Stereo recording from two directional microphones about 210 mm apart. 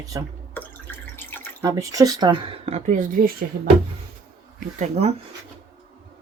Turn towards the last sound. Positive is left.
turn(degrees=-30)  # may be behind; listen again after turning